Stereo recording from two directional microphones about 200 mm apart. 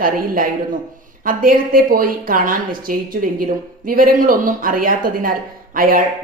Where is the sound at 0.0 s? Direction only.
45° right (ahead or behind).